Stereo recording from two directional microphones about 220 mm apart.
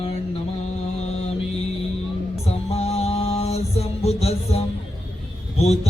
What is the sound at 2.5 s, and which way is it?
Mantra, 30° left (ahead or behind).